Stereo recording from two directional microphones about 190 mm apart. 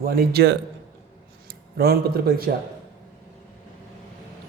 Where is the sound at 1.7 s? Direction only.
55° right (ahead or behind).